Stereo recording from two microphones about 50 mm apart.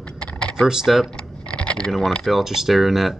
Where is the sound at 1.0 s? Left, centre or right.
Centre.